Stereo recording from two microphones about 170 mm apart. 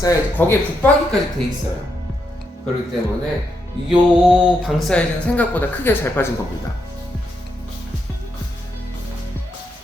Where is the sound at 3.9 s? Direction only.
5° right (ahead or behind); by 6.2 s 10° left (ahead or behind).